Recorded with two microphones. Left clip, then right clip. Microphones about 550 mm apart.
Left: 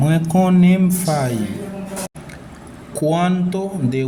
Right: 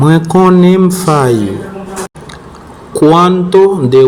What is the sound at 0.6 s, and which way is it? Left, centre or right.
Speech, left.